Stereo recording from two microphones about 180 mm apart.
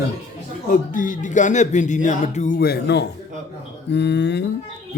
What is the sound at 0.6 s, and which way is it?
A man's voice, 45° left (ahead or behind).